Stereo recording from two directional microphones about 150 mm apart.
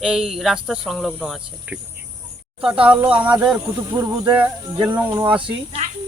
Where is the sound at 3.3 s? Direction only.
5° right (ahead or behind).